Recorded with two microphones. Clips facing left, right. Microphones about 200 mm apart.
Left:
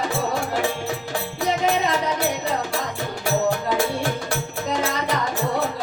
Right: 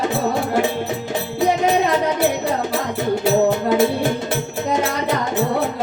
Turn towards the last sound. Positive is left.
turn(degrees=-20)  # may be behind; listen again after turning